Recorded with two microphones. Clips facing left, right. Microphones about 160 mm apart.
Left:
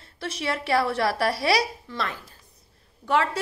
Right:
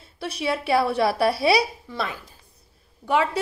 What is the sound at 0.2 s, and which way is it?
A woman's voice, 15° right (ahead or behind).